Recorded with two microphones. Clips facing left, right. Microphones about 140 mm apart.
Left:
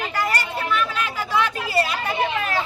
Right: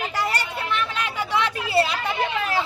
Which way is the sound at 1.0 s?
20° right (ahead or behind).